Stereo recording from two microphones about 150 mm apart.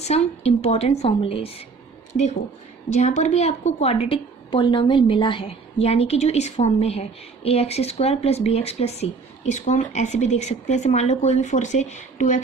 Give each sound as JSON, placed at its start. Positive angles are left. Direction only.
{"t": 0.0, "sound": "a woman's voice", "side_deg": 45}
{"t": 2.9, "sound": "speech", "side_deg": 50}